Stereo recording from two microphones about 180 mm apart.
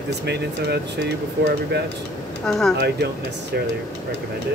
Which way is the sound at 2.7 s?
65° right (ahead or behind).